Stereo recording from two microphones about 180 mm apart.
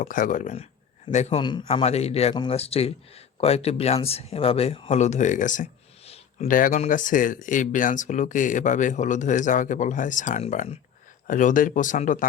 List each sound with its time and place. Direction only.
0.0 s speech: 45° left (ahead or behind)